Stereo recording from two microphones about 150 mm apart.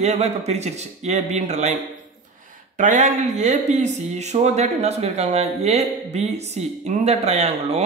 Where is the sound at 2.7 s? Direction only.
55° right (ahead or behind).